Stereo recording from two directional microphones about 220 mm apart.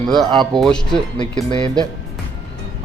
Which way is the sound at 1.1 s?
20° left (ahead or behind).